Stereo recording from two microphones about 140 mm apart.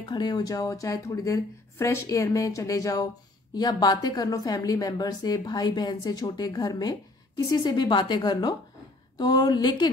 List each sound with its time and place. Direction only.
0.0 s a woman's voice: 30° left (ahead or behind)